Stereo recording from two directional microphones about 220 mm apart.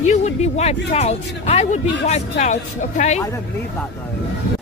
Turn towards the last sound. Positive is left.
turn(degrees=30)  # may be behind; listen again after turning